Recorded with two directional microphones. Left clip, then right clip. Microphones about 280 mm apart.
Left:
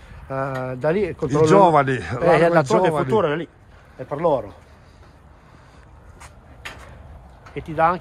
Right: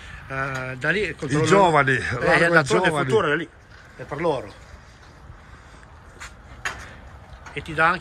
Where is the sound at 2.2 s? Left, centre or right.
Left.